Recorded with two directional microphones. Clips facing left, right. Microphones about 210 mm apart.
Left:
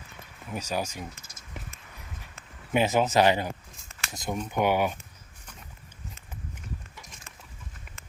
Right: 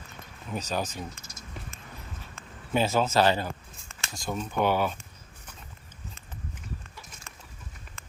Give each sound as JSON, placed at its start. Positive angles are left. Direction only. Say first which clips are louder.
{"t": 0.5, "sound": "speech", "louder": "even", "side_deg": 10}
{"t": 2.7, "sound": "speech", "louder": "left 1 dB", "side_deg": 15}